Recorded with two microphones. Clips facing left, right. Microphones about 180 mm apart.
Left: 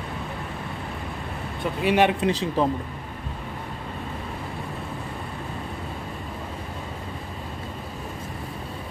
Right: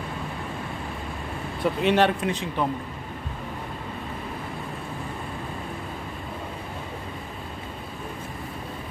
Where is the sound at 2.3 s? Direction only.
35° left (ahead or behind).